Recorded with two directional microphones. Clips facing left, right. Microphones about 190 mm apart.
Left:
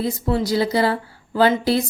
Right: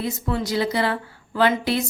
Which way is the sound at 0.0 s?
35° left (ahead or behind).